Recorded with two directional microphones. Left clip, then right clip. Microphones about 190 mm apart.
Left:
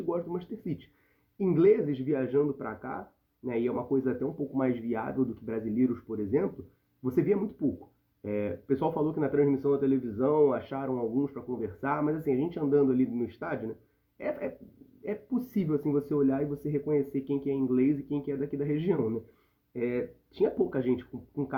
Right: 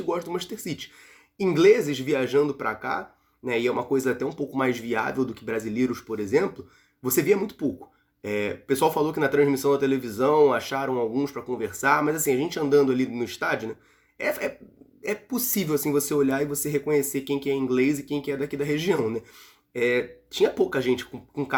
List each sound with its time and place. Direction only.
0.1 s speech: 15° right (ahead or behind)
7.0 s speech: 15° right (ahead or behind)